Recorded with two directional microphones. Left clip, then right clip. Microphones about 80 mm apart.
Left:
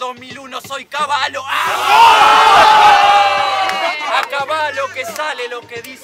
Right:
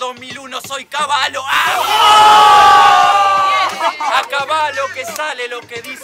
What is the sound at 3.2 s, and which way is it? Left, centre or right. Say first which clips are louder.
Crowd: right 1 dB; right.